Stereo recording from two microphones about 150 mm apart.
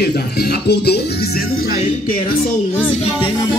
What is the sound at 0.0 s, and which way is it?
Music, 90° left.